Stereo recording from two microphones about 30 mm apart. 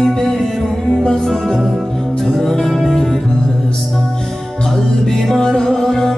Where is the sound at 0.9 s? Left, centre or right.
Left.